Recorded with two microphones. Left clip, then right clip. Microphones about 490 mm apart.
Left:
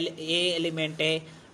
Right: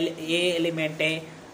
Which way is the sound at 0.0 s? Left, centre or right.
Left.